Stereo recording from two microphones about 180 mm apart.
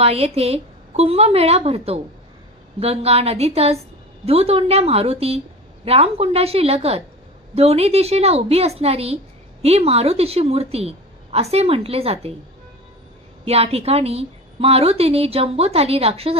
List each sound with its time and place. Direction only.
0.0 s a woman's voice: 35° right (ahead or behind)
13.4 s a woman's voice: 35° right (ahead or behind)